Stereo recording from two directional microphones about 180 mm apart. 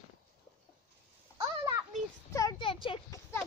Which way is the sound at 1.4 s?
20° right (ahead or behind).